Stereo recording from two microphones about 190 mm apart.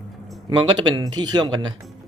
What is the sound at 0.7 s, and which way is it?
Speech, 20° right (ahead or behind).